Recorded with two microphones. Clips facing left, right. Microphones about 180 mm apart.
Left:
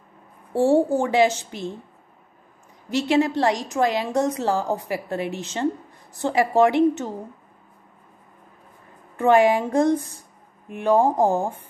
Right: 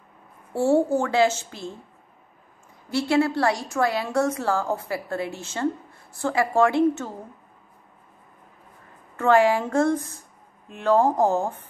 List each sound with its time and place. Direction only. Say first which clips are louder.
0.5 s a woman's voice: left 2 dB; 15° left (ahead or behind)
2.9 s a woman's voice: left 1 dB; 20° left (ahead or behind)
9.1 s a woman's voice: left 2 dB; 15° left (ahead or behind)